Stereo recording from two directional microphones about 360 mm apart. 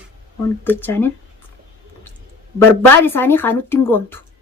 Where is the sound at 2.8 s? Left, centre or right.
Centre.